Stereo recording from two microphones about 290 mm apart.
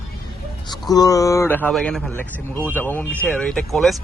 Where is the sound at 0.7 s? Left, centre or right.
Centre.